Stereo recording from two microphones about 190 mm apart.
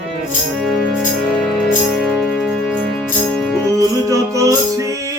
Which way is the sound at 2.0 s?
Centre (ahead or behind).